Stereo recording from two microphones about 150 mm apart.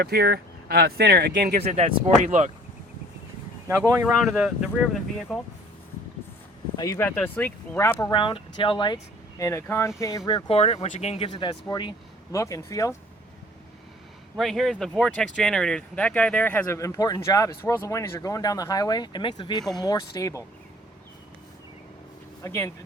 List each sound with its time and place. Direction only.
0.0 s speech: 90° right
1.6 s speech: 45° right (ahead or behind)
3.7 s speech: 15° right (ahead or behind)
4.0 s speech: centre (ahead or behind)
6.7 s speech: 20° left (ahead or behind)
7.2 s speech: 10° left (ahead or behind)
8.1 s speech: 35° left (ahead or behind)
9.4 s speech: 20° left (ahead or behind)
10.2 s speech: 35° left (ahead or behind)
14.3 s speech: centre (ahead or behind); by 20.4 s 20° left (ahead or behind)
22.4 s speech: 20° left (ahead or behind)